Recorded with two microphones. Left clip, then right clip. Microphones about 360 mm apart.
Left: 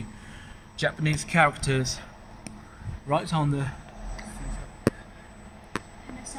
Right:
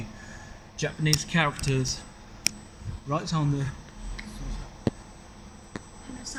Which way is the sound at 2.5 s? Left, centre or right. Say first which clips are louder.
Right 17 dB; right.